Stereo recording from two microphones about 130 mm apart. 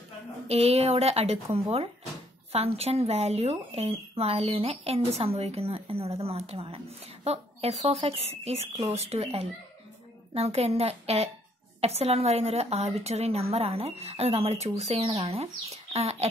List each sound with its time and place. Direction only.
0.5 s speech: 55° right (ahead or behind)